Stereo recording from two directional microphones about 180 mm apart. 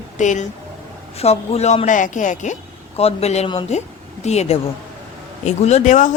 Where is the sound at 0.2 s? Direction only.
40° left (ahead or behind).